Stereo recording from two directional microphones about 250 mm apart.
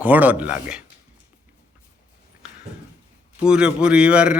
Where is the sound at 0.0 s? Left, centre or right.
Centre.